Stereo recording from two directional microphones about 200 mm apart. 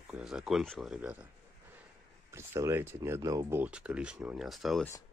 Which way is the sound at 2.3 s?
15° right (ahead or behind).